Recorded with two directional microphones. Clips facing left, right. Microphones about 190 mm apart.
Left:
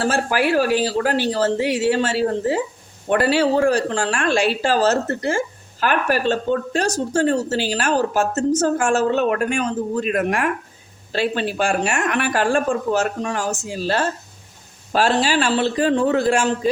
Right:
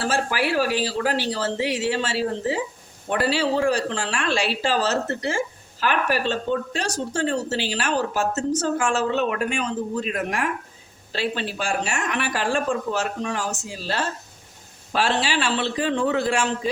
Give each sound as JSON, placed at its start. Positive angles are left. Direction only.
{"t": 0.0, "sound": "speech", "side_deg": 50}